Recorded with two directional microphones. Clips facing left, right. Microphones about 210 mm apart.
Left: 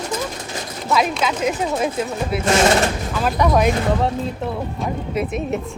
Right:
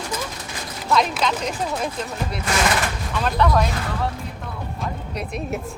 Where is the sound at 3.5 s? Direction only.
20° left (ahead or behind).